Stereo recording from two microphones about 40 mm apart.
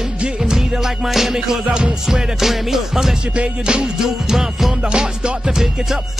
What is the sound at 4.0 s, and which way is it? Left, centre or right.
Music, centre.